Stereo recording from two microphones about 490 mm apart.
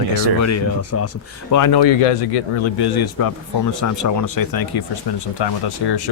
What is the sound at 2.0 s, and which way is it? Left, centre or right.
Speech, left.